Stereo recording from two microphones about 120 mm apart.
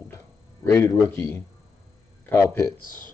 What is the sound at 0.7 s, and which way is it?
Speech, 20° left (ahead or behind).